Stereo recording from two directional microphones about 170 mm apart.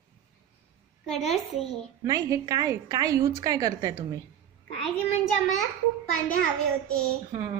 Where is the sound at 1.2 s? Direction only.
Centre (ahead or behind).